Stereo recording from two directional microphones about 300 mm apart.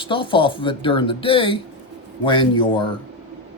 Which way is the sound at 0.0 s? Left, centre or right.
Centre.